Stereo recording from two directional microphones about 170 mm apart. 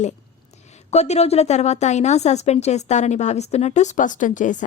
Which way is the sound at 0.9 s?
40° left (ahead or behind).